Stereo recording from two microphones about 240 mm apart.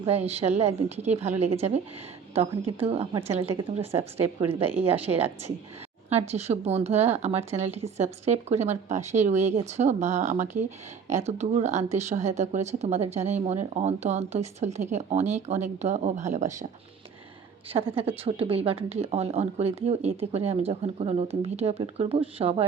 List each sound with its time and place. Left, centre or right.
0.0 s speech: right
17.7 s speech: right